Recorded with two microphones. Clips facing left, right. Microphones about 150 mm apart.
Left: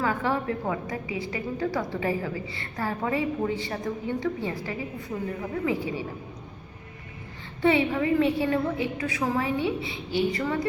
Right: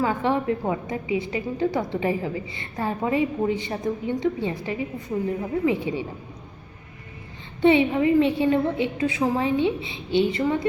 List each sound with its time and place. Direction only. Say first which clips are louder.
0.0 s a woman's voice: right 4 dB; 20° right (ahead or behind)
7.6 s a woman's voice: right 5 dB; 20° right (ahead or behind)